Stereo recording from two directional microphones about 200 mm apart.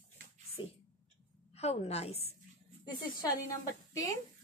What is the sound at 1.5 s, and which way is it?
Speech, 30° left (ahead or behind).